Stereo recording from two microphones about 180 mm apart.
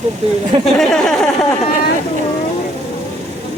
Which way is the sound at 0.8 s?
Centre (ahead or behind).